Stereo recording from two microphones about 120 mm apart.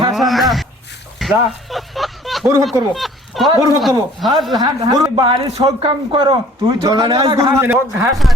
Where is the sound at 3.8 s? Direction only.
Centre (ahead or behind).